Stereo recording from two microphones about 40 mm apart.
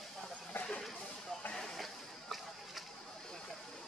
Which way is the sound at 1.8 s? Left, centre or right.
Centre.